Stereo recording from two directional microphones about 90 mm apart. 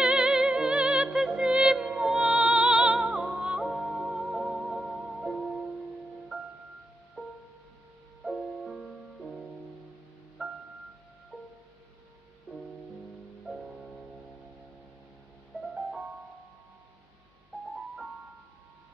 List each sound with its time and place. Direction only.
0.0 s music: 10° right (ahead or behind)
10.4 s music: 5° right (ahead or behind)
11.3 s music: 5° left (ahead or behind)
15.5 s music: 15° right (ahead or behind)